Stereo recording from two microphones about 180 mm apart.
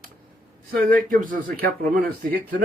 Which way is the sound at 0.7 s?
50° right (ahead or behind).